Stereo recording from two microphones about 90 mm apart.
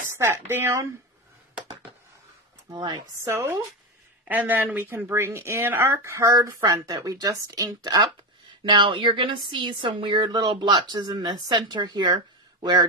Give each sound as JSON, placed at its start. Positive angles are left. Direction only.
{"t": 0.1, "sound": "speech", "side_deg": -30}
{"t": 2.7, "sound": "speech", "side_deg": -50}
{"t": 3.2, "sound": "speech", "side_deg": -30}
{"t": 4.3, "sound": "speech", "side_deg": -20}
{"t": 8.6, "sound": "speech", "side_deg": -65}